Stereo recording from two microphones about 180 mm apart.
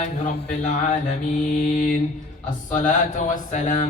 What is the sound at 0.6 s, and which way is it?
Mantra, 40° left (ahead or behind).